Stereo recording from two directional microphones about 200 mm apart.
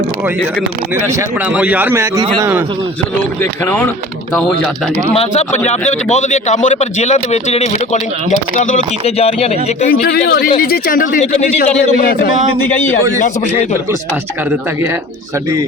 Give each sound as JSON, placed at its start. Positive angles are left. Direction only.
{"t": 1.5, "sound": "a man's voice", "side_deg": -5}
{"t": 5.1, "sound": "a man's voice", "side_deg": 35}
{"t": 9.9, "sound": "a man's voice", "side_deg": 50}
{"t": 12.5, "sound": "speech", "side_deg": 10}